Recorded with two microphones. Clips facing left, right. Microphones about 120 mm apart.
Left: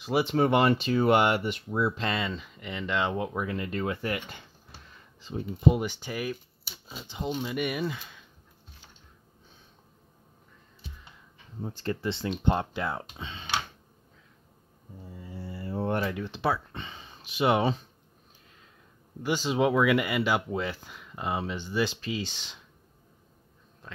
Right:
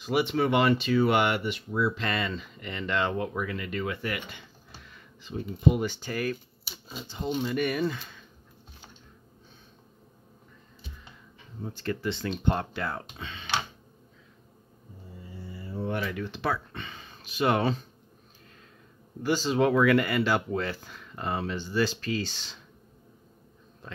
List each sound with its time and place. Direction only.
0.0 s speech: 35° left (ahead or behind)
1.8 s speech: 25° left (ahead or behind)
5.8 s speech: 15° left (ahead or behind)
6.6 s a sound: centre (ahead or behind)
7.2 s speech: centre (ahead or behind)
11.6 s speech: 25° left (ahead or behind)
15.9 s speech: 35° left (ahead or behind)
16.2 s speech: 25° left (ahead or behind)
19.2 s speech: 15° left (ahead or behind)